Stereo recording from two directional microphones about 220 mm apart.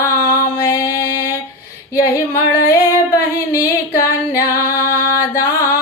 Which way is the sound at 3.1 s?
15° left (ahead or behind).